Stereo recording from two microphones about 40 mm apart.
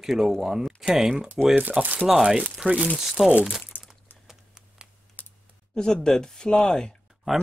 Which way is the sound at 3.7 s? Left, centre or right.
Left.